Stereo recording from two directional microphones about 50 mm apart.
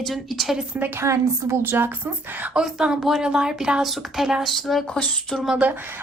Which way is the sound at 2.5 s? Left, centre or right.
Centre.